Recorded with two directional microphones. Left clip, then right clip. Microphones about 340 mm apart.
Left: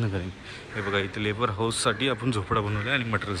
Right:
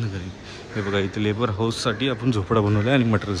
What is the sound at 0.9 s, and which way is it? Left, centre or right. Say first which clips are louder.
Speech: right 4 dB; centre.